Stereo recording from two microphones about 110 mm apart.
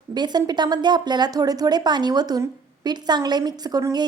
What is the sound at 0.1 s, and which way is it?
A woman's voice, 40° right (ahead or behind).